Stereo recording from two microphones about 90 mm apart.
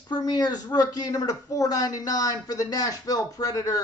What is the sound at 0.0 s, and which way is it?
Speech, 45° left (ahead or behind).